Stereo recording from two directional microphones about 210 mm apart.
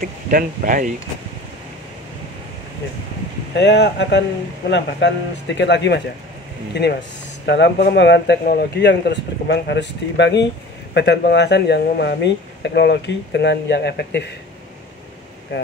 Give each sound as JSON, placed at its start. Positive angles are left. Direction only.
{"t": 0.0, "sound": "speech", "side_deg": -40}
{"t": 3.5, "sound": "speech", "side_deg": 55}